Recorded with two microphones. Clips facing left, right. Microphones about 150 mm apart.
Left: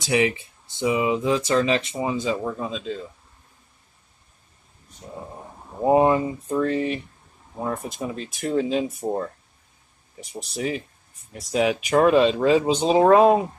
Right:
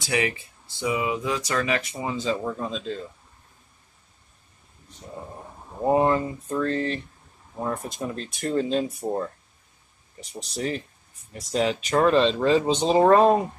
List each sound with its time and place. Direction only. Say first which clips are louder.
0.0 s speech: left 4 dB; 20° left (ahead or behind); by 3.1 s centre (ahead or behind)
5.8 s speech: left 3 dB; 15° left (ahead or behind)
10.3 s speech: left 1 dB; 5° left (ahead or behind)